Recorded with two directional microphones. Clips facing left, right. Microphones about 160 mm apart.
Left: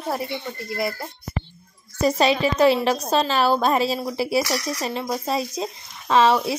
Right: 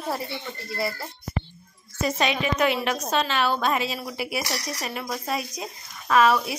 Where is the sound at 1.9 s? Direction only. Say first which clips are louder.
Left 6 dB; 35° left (ahead or behind).